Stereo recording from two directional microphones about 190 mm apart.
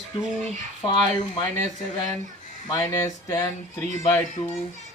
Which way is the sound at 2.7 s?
20° left (ahead or behind).